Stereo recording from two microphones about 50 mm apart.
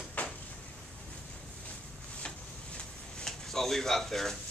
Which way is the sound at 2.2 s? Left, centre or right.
Left.